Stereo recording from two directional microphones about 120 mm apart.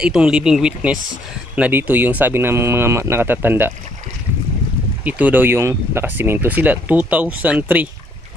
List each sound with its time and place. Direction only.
0.0 s speech: 5° right (ahead or behind)
5.0 s speech: 15° right (ahead or behind)